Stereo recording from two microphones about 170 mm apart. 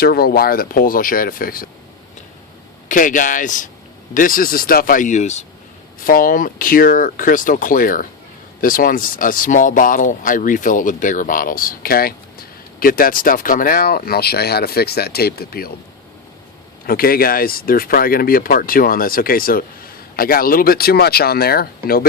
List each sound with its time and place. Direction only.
0.0 s speech: 65° left (ahead or behind)
2.9 s speech: 50° left (ahead or behind)
6.1 s speech: 55° left (ahead or behind)
16.8 s speech: 60° left (ahead or behind)